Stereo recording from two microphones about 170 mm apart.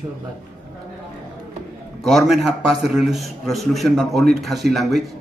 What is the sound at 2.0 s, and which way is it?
A man's voice, centre (ahead or behind).